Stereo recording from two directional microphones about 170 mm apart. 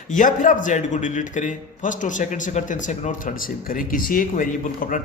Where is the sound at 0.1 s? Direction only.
50° left (ahead or behind).